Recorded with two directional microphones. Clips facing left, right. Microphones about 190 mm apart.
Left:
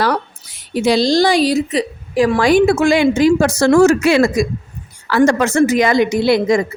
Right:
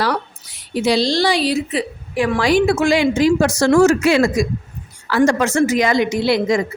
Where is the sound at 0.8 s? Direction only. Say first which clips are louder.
Left 3 dB; 50° left (ahead or behind).